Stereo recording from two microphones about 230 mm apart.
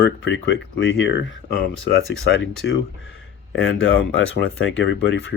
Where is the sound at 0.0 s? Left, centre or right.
Left.